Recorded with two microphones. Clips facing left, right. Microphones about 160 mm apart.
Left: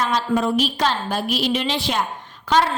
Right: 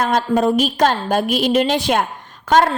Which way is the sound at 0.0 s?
50° right (ahead or behind).